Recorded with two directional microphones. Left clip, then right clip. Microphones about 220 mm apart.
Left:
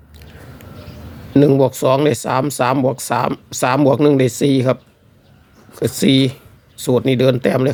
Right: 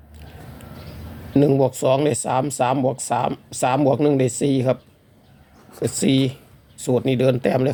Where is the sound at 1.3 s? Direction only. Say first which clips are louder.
Left 5 dB; 15° left (ahead or behind).